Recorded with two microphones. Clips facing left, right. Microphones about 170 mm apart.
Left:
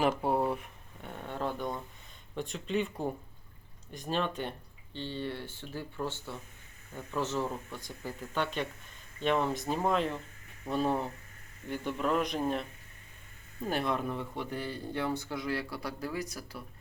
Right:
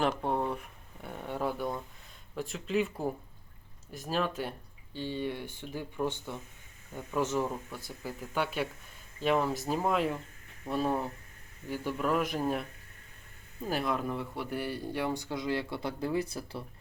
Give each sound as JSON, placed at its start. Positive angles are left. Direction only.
{"t": 0.0, "sound": "a sound", "side_deg": 5}
{"t": 2.3, "sound": "speech", "side_deg": 0}
{"t": 13.7, "sound": "speech", "side_deg": -5}